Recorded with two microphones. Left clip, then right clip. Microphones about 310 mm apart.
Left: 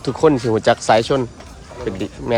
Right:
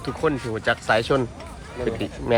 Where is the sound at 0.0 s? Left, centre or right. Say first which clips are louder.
Left 9 dB; centre.